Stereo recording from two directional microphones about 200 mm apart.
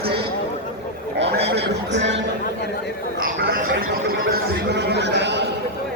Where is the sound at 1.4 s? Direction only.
55° right (ahead or behind).